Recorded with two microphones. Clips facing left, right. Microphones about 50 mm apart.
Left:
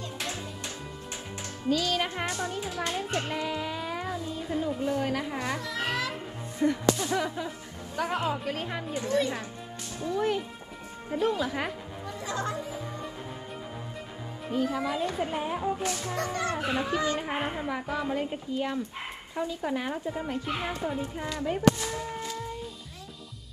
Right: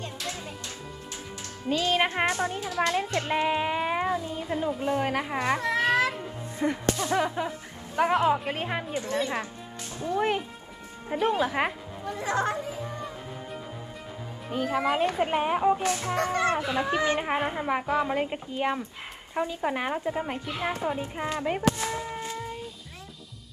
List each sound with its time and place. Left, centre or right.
1.7 s a child's voice: right
6.6 s speech: right
14.5 s a child's voice: right
15.8 s speech: right